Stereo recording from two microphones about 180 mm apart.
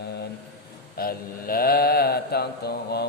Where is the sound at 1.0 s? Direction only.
55° left (ahead or behind).